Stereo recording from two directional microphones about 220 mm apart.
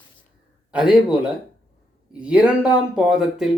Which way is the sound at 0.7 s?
5° right (ahead or behind).